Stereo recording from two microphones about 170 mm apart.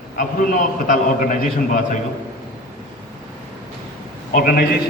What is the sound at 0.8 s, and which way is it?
Speech, 50° left (ahead or behind).